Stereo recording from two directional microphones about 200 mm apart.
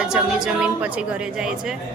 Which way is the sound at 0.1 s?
5° right (ahead or behind).